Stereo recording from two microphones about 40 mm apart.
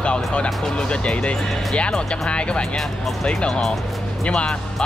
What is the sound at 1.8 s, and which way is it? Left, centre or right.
Speech, left.